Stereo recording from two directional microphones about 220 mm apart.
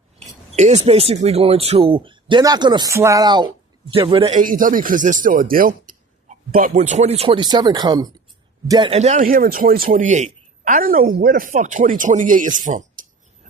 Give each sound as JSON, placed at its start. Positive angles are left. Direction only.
{"t": 0.5, "sound": "speech", "side_deg": -30}
{"t": 4.4, "sound": "a man's voice", "side_deg": -40}
{"t": 8.9, "sound": "a man's voice", "side_deg": -30}